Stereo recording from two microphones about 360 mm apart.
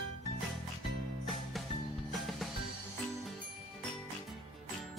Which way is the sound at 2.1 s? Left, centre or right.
Centre.